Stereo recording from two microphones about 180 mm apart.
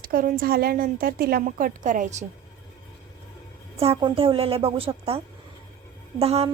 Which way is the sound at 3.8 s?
30° right (ahead or behind).